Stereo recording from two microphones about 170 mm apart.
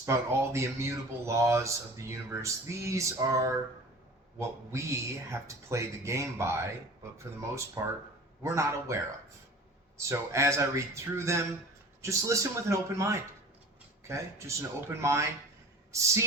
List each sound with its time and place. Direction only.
0.0 s speech: 15° right (ahead or behind)
7.8 s speech: 15° right (ahead or behind)
10.0 s speech: 15° right (ahead or behind)